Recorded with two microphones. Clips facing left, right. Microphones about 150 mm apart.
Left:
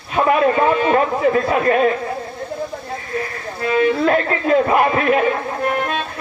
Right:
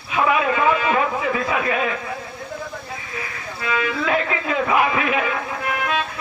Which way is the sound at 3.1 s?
45° left (ahead or behind).